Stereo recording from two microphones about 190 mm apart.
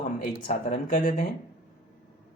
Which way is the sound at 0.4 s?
40° left (ahead or behind).